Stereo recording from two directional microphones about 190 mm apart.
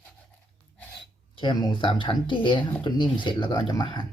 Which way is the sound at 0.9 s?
25° left (ahead or behind).